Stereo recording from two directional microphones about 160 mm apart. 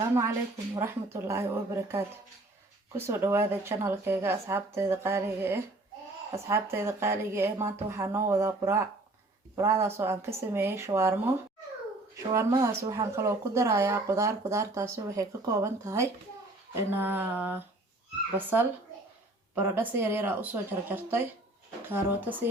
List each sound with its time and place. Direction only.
0.8 s speech: 15° right (ahead or behind)